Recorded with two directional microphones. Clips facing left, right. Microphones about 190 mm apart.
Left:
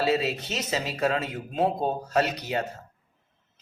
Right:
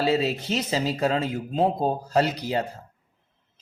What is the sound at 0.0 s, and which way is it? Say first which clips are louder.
A man's voice: right 2 dB; 30° right (ahead or behind).